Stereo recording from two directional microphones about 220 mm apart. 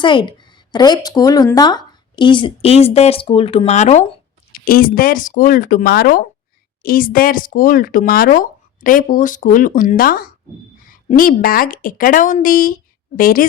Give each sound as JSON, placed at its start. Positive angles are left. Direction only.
{"t": 0.0, "sound": "speech", "side_deg": 20}
{"t": 4.5, "sound": "speech", "side_deg": 40}